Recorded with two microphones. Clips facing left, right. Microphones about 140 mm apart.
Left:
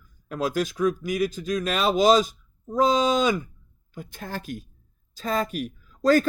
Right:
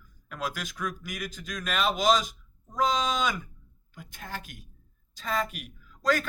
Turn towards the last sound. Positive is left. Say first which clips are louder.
# left 8 dB
turn(degrees=35)  # may be behind; listen again after turning